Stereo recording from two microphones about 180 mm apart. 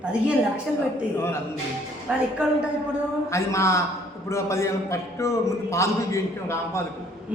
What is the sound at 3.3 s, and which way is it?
A man's voice, 15° left (ahead or behind).